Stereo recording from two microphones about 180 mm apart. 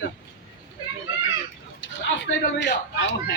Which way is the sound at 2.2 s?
80° left.